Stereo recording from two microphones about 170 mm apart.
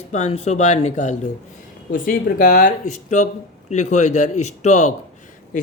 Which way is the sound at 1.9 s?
55° left (ahead or behind).